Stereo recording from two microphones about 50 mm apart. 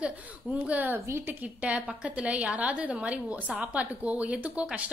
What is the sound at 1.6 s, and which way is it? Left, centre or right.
Speech, right.